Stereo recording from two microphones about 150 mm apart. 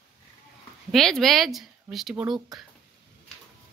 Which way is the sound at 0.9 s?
Centre (ahead or behind).